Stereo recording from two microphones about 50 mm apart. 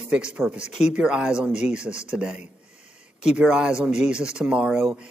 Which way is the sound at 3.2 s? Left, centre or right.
Centre.